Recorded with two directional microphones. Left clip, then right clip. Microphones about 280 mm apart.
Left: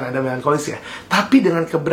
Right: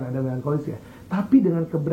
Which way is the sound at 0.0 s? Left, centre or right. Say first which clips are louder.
Left 9 dB; centre.